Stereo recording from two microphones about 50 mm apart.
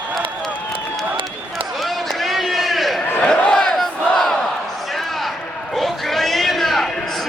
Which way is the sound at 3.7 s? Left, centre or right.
Centre.